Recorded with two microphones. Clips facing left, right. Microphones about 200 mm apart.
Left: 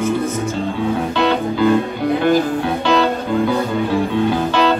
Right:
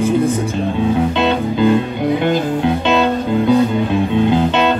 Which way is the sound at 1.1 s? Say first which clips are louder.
Right 1 dB; 20° right (ahead or behind).